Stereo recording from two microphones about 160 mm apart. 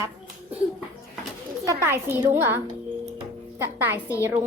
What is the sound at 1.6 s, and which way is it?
A woman's voice, 20° right (ahead or behind).